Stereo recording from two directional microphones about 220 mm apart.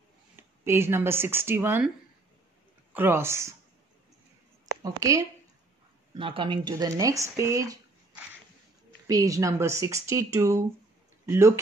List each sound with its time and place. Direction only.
0.4 s speech: 10° right (ahead or behind)
2.9 s speech: 10° right (ahead or behind)
5.0 s speech: 15° right (ahead or behind)
9.0 s speech: 15° right (ahead or behind)